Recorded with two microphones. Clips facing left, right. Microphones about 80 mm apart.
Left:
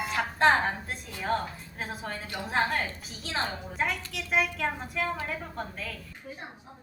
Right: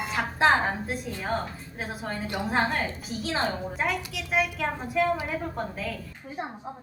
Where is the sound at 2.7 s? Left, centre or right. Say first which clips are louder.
Right 2 dB; centre.